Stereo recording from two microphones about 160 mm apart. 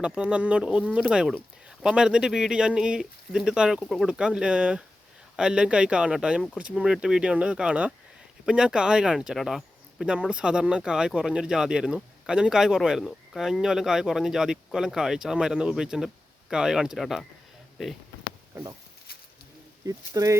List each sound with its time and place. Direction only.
0.0 s speech: 5° right (ahead or behind)
19.8 s speech: 20° right (ahead or behind)